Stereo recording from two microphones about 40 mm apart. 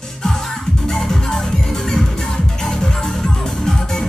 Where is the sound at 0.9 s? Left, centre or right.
Centre.